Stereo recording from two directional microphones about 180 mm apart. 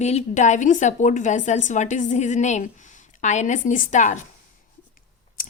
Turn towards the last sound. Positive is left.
turn(degrees=50)  # may be behind; listen again after turning